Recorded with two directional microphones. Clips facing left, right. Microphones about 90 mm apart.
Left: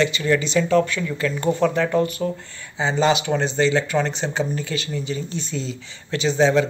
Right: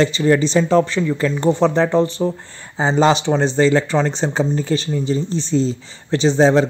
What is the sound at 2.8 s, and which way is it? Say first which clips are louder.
Speech: right 4 dB; 35° right (ahead or behind).